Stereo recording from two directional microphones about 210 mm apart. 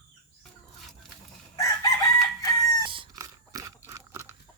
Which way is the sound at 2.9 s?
20° right (ahead or behind).